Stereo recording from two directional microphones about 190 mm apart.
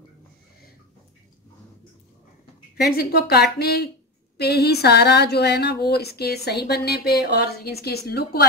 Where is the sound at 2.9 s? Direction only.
55° left (ahead or behind).